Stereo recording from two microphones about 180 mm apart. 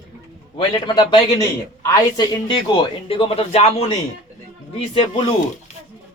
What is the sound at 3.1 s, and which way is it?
Speech, 30° left (ahead or behind).